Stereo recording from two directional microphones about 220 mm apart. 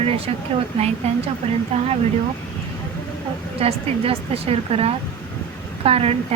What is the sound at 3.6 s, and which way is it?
A woman's voice, 25° right (ahead or behind).